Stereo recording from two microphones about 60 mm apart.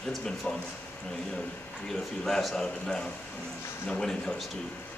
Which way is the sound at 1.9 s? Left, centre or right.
Centre.